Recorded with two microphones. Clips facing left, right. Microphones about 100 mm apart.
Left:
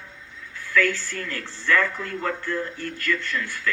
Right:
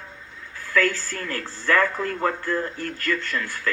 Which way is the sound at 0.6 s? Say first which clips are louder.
Even; 35° right (ahead or behind).